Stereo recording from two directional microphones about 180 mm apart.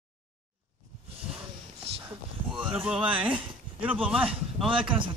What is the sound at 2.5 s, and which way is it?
Speech, 5° right (ahead or behind).